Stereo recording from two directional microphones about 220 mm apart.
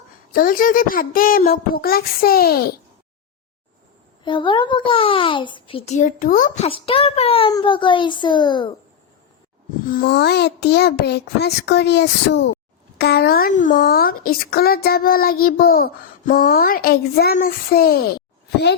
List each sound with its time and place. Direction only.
0.3 s speech: 40° left (ahead or behind)
4.2 s a child's voice: 20° left (ahead or behind)
9.8 s speech: 40° left (ahead or behind)